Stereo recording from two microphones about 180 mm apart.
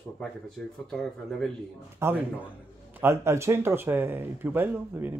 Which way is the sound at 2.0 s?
10° right (ahead or behind).